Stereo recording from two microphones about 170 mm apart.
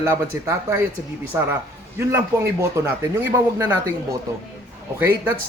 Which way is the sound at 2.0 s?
15° right (ahead or behind).